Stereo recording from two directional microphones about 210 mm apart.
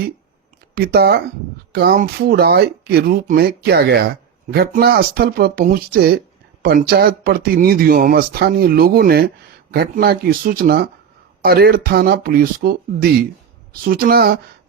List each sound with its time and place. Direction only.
0.8 s speech: 50° right (ahead or behind)